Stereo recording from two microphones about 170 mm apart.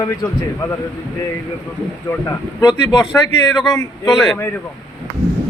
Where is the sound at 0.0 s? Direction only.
20° left (ahead or behind).